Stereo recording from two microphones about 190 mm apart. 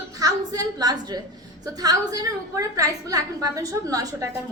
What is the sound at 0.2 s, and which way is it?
A woman's voice, 20° right (ahead or behind).